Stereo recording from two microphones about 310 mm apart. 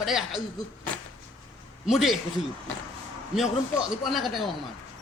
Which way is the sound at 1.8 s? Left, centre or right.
Centre.